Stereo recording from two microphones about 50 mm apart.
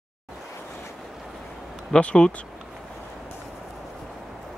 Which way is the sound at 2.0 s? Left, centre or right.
Left.